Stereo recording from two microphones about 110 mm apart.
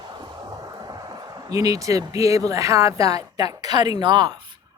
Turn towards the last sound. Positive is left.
turn(degrees=-40)  # may be behind; listen again after turning